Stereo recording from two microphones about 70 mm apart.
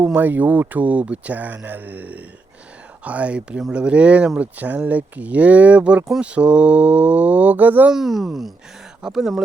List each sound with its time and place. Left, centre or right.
0.0 s speech: right
7.9 s speech: centre